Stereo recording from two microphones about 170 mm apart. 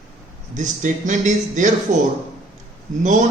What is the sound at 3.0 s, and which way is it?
Speech, 45° right (ahead or behind).